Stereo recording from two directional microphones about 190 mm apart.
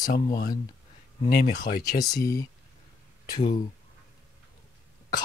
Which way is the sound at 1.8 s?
20° left (ahead or behind).